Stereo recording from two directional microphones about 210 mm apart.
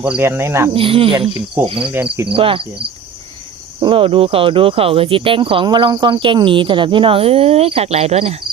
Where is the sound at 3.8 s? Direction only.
25° right (ahead or behind).